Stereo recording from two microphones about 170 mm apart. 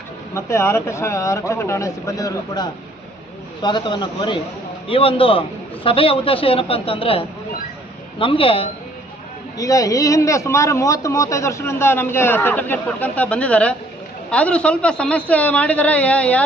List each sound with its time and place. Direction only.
0.3 s a man's voice: 15° left (ahead or behind); by 8.7 s 35° left (ahead or behind)
9.6 s speech: 20° left (ahead or behind)